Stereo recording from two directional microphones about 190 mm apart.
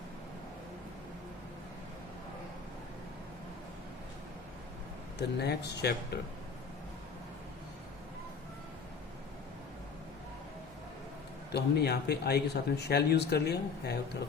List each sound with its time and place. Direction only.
5.1 s speech: 60° left (ahead or behind)
11.5 s speech: 60° left (ahead or behind)